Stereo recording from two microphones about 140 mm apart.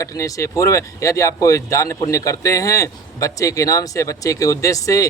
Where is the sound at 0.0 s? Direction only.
25° left (ahead or behind).